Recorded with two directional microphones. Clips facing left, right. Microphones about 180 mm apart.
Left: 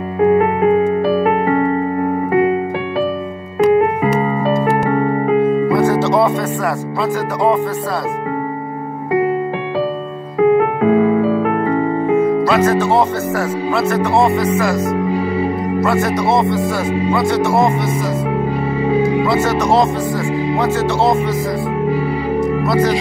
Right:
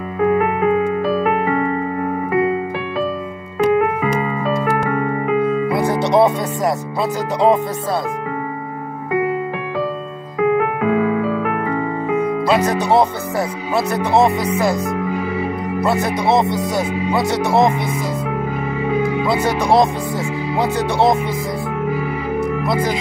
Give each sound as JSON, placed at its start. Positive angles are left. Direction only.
{"t": 0.2, "sound": "music", "side_deg": 30}
{"t": 2.3, "sound": "keyboard", "side_deg": 30}
{"t": 3.5, "sound": "music", "side_deg": 30}
{"t": 5.9, "sound": "music", "side_deg": -15}
{"t": 10.4, "sound": "music", "side_deg": 30}
{"t": 12.4, "sound": "speech", "side_deg": -15}
{"t": 15.8, "sound": "speech", "side_deg": -15}
{"t": 18.9, "sound": "music", "side_deg": 30}
{"t": 19.2, "sound": "speech", "side_deg": -15}
{"t": 22.7, "sound": "speech", "side_deg": -10}